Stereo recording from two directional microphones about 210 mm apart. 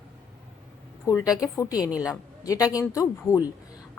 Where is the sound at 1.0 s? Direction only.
15° left (ahead or behind).